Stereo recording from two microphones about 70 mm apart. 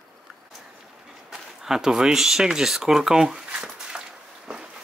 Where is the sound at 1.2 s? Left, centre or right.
Centre.